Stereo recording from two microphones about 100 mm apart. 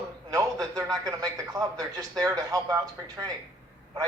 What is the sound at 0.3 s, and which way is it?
A man's voice, 35° right (ahead or behind).